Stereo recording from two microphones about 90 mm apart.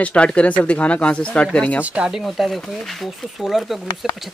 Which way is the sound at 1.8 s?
10° right (ahead or behind).